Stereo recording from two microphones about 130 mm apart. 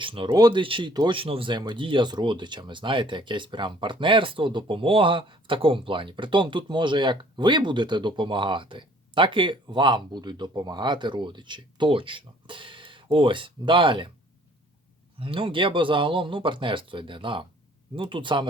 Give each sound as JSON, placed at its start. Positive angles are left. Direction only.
{"t": 0.0, "sound": "speech", "side_deg": -40}
{"t": 15.2, "sound": "speech", "side_deg": -45}